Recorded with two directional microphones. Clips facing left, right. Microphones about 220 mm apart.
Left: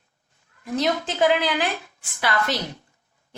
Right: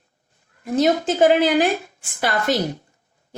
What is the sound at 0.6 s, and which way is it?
A woman's voice, 45° right (ahead or behind).